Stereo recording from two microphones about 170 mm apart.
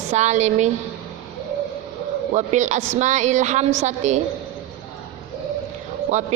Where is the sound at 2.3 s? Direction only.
45° right (ahead or behind).